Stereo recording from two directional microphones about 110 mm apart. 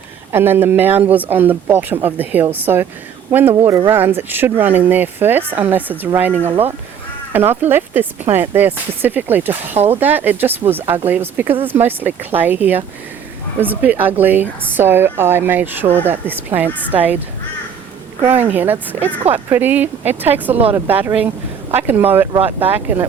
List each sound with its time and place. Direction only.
0.3 s speech: 20° right (ahead or behind)
18.2 s speech: 20° right (ahead or behind)